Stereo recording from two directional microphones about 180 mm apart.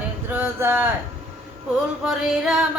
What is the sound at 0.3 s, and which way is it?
Speech, 10° right (ahead or behind).